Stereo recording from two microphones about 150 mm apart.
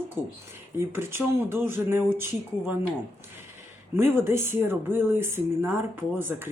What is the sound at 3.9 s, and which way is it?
Speech, 15° right (ahead or behind).